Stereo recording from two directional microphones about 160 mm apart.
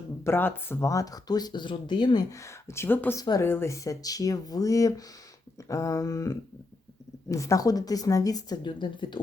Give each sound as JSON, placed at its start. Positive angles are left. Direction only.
{"t": 0.3, "sound": "speech", "side_deg": 15}